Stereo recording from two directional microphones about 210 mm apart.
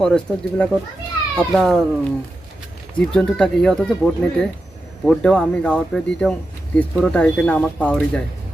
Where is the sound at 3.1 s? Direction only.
5° left (ahead or behind).